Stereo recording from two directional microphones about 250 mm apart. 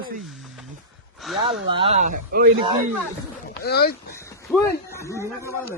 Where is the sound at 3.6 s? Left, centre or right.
Left.